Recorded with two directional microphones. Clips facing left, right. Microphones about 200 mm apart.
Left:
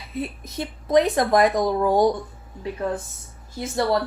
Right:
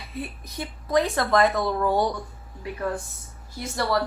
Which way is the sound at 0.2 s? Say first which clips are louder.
Left 5 dB; 25° left (ahead or behind).